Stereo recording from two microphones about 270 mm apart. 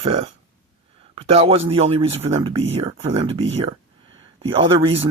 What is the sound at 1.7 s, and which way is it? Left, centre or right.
Speech, right.